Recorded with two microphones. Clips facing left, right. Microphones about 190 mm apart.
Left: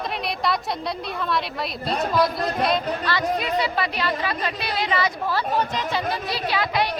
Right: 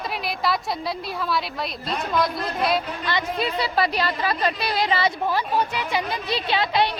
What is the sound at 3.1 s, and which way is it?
Speech, 15° right (ahead or behind).